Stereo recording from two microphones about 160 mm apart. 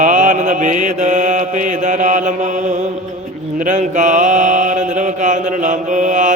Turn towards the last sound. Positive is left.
turn(degrees=-50)  # may be behind; listen again after turning